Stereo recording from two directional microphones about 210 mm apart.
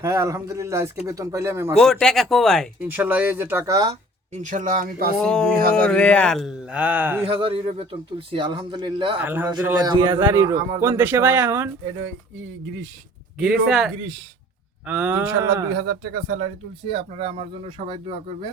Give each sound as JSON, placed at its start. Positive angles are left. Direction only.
{"t": 0.0, "sound": "a man's voice", "side_deg": -15}
{"t": 1.8, "sound": "speech", "side_deg": 0}
{"t": 2.8, "sound": "a man's voice", "side_deg": -10}
{"t": 4.3, "sound": "speech", "side_deg": -35}
{"t": 5.2, "sound": "speech", "side_deg": 5}
{"t": 7.4, "sound": "speech", "side_deg": -25}
{"t": 9.1, "sound": "a man's voice", "side_deg": -10}
{"t": 9.5, "sound": "a man's voice", "side_deg": -20}
{"t": 13.4, "sound": "a man's voice", "side_deg": -5}
{"t": 15.7, "sound": "speech", "side_deg": -55}
{"t": 16.9, "sound": "speech", "side_deg": -25}